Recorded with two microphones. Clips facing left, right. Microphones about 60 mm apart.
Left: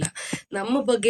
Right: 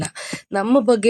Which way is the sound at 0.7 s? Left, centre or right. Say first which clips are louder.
Right 7 dB; right.